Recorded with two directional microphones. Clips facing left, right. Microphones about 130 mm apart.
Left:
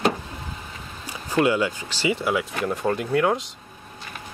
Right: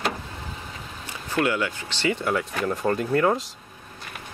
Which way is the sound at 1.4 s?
15° left (ahead or behind).